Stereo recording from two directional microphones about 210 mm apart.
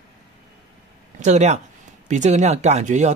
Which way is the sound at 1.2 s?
30° right (ahead or behind).